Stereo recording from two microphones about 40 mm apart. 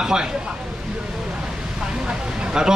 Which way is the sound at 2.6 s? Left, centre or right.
Centre.